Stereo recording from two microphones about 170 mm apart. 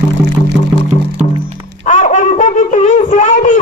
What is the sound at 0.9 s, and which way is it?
Music, 40° left (ahead or behind).